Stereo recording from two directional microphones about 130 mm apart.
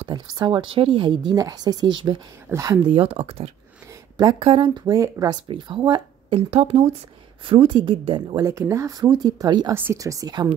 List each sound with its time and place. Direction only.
0.1 s speech: 30° right (ahead or behind)
2.5 s speech: 25° right (ahead or behind)
2.9 s speech: 45° right (ahead or behind)
3.9 s a sound: 30° right (ahead or behind)
4.5 s speech: 40° right (ahead or behind)
5.3 s speech: 40° right (ahead or behind); by 7.0 s 55° right (ahead or behind)
7.4 s speech: 40° right (ahead or behind)
8.4 s speech: 20° right (ahead or behind)